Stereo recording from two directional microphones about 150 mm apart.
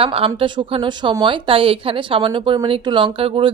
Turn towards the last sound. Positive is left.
turn(degrees=-35)  # may be behind; listen again after turning